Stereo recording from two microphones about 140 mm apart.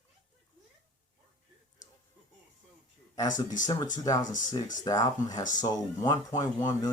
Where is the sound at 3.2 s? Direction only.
30° left (ahead or behind).